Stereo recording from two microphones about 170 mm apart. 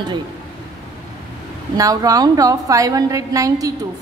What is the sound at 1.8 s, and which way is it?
A woman's voice, 20° right (ahead or behind).